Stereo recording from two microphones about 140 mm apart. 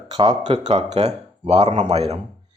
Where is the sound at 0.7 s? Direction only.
50° right (ahead or behind).